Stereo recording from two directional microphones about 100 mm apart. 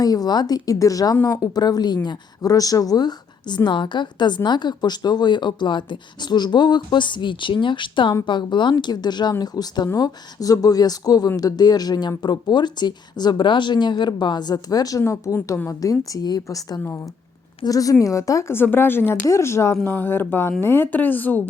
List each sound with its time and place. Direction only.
0.0 s speech: 40° left (ahead or behind); by 21.4 s 20° left (ahead or behind)